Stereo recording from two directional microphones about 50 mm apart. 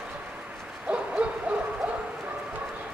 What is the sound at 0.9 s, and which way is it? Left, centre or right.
Hoot, right.